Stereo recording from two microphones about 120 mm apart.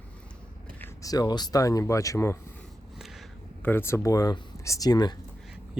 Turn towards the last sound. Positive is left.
turn(degrees=35)  # may be behind; listen again after turning